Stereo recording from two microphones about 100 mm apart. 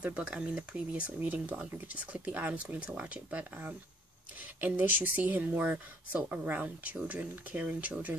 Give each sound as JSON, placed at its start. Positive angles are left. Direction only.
{"t": 0.0, "sound": "speech", "side_deg": -10}